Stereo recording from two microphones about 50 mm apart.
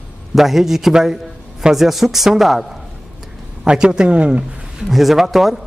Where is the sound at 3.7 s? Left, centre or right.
Centre.